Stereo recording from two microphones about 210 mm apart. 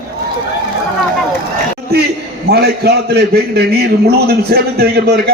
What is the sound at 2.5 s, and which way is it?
A man's voice, 50° right (ahead or behind).